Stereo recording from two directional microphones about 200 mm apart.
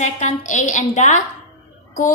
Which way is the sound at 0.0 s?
40° left (ahead or behind).